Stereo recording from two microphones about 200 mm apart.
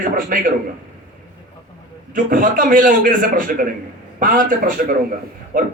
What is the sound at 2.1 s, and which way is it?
A man's voice, 45° right (ahead or behind).